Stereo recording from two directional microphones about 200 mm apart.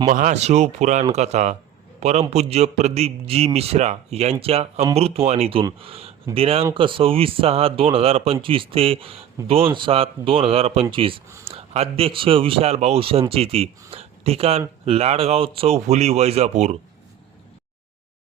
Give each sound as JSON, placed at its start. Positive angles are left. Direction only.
{"t": 0.1, "sound": "a man's voice", "side_deg": -40}
{"t": 13.9, "sound": "a sound", "side_deg": -30}
{"t": 14.8, "sound": "a man's voice", "side_deg": -30}